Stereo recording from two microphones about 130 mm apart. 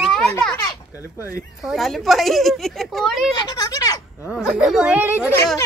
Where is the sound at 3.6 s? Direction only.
30° left (ahead or behind).